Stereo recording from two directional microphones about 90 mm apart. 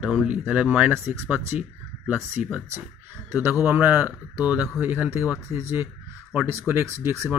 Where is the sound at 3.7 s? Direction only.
15° right (ahead or behind).